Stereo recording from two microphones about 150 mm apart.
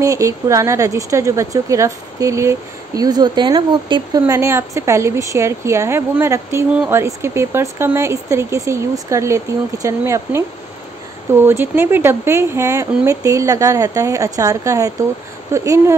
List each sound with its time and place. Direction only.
0.0 s speech: 20° right (ahead or behind)
11.4 s speech: 15° right (ahead or behind)